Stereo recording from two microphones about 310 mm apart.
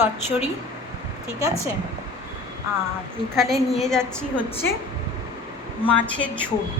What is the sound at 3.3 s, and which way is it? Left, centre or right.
A woman's voice, centre.